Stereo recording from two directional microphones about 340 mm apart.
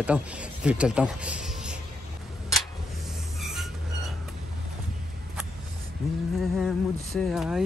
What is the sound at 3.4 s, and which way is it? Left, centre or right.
Music, centre.